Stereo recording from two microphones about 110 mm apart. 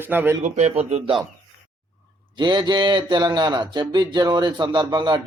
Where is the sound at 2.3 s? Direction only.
45° right (ahead or behind).